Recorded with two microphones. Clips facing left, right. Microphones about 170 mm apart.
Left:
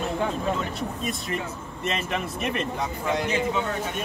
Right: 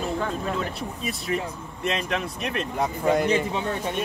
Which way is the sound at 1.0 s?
Centre (ahead or behind).